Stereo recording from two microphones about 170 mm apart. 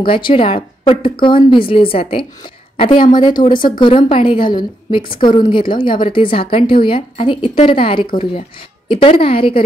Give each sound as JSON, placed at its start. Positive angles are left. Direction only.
{"t": 0.0, "sound": "a woman's voice", "side_deg": 30}